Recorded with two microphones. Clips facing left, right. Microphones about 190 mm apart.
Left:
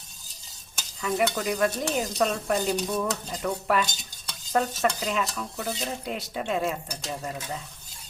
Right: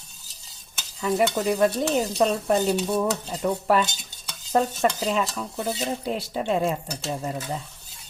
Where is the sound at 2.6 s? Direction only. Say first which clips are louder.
Right 4 dB; 5° right (ahead or behind).